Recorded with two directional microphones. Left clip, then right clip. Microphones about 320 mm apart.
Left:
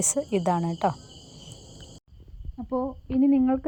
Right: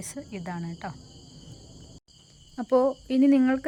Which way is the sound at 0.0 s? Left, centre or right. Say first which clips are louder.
Left 13 dB; left.